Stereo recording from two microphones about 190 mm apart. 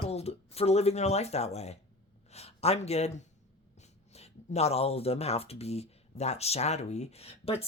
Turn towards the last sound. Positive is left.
turn(degrees=30)  # may be behind; listen again after turning